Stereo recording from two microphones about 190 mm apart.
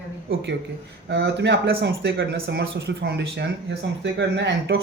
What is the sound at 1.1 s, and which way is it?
Speech, 65° right (ahead or behind).